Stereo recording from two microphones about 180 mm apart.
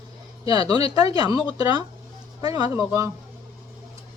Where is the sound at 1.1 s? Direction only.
20° right (ahead or behind).